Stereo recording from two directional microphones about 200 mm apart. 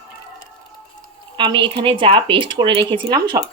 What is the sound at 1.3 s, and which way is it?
Speech, 25° right (ahead or behind).